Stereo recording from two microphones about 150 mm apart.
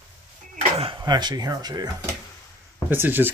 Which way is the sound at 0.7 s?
40° right (ahead or behind).